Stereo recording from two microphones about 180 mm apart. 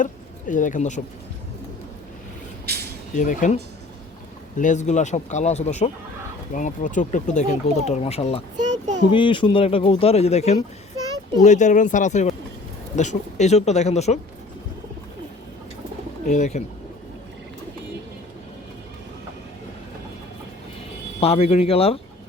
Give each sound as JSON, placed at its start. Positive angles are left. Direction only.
{"t": 0.0, "sound": "speech", "side_deg": 45}
{"t": 2.6, "sound": "a sound", "side_deg": -65}
{"t": 3.2, "sound": "speech", "side_deg": 45}
{"t": 16.2, "sound": "speech", "side_deg": 40}
{"t": 21.2, "sound": "speech", "side_deg": 35}